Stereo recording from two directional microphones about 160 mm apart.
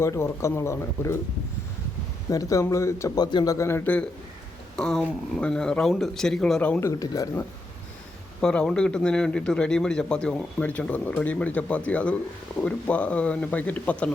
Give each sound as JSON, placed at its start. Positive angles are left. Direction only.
{"t": 0.0, "sound": "speech", "side_deg": 15}
{"t": 2.3, "sound": "a man's voice", "side_deg": 20}
{"t": 8.4, "sound": "a man's voice", "side_deg": 5}